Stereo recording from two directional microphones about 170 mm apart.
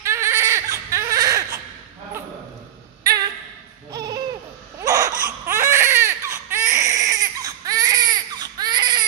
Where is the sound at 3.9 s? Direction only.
20° right (ahead or behind).